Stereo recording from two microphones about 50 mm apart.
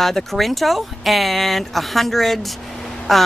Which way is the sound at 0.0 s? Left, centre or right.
Centre.